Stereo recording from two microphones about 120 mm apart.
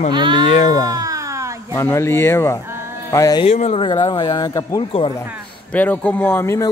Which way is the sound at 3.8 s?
40° left (ahead or behind).